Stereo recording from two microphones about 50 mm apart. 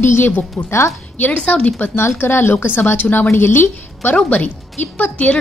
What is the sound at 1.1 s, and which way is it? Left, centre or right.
Speech, left.